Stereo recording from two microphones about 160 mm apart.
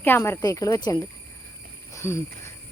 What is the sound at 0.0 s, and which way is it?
Speech, 15° left (ahead or behind).